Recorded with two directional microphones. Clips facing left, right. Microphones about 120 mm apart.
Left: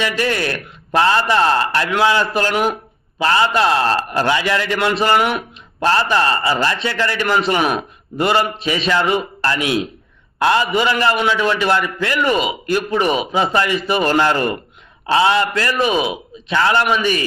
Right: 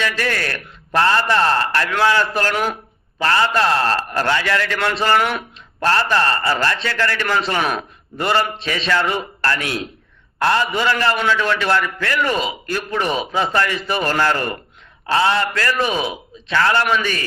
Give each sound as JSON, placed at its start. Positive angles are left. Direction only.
{"t": 0.0, "sound": "speech", "side_deg": 20}